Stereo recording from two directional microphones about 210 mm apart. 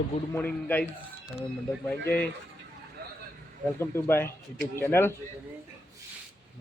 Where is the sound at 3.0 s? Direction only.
45° right (ahead or behind).